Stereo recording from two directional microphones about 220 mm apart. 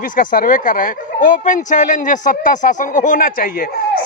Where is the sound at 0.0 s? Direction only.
40° left (ahead or behind).